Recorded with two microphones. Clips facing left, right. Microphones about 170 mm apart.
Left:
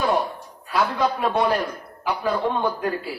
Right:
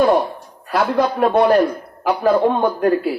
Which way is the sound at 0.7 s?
55° right (ahead or behind).